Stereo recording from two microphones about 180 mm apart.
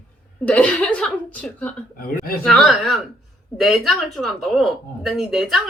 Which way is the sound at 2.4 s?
Centre (ahead or behind).